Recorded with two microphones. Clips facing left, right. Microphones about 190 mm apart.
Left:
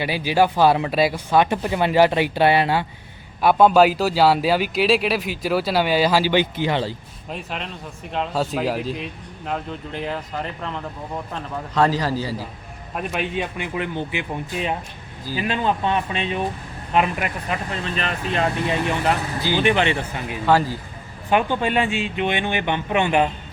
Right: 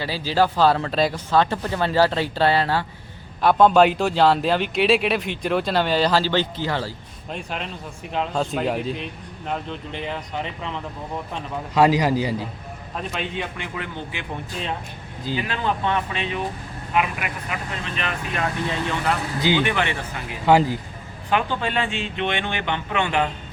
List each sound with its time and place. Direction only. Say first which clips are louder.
0.0 s speech: left 2 dB; 15° left (ahead or behind)
7.3 s speech: even; centre (ahead or behind)
11.7 s a man's voice: right 3 dB; 15° right (ahead or behind)
13.0 s speech: left 4 dB; 15° left (ahead or behind)
15.2 s speech: right 1 dB; 20° right (ahead or behind)
15.4 s speech: left 5 dB; 20° left (ahead or behind)
16.9 s speech: left 3 dB; 35° left (ahead or behind)
18.6 s speech: left 3 dB; 20° left (ahead or behind)
20.5 s a man's voice: right 2 dB; 15° right (ahead or behind)
21.2 s speech: left 3 dB; 20° left (ahead or behind)